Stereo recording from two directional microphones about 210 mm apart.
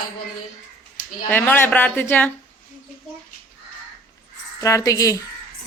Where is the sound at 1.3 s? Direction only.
10° left (ahead or behind).